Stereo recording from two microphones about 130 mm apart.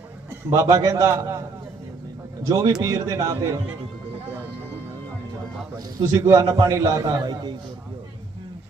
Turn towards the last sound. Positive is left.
turn(degrees=-35)  # may be behind; listen again after turning